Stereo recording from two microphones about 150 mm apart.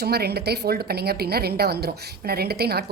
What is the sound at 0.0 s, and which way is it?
A woman's voice, 90° right.